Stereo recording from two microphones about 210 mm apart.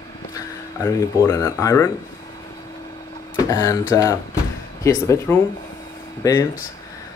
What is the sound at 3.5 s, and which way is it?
Speech, 15° left (ahead or behind).